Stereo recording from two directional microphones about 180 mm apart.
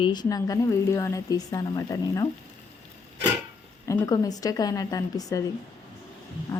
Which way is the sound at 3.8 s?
20° left (ahead or behind).